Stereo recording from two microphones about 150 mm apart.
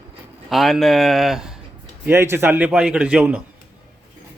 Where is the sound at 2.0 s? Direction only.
15° right (ahead or behind).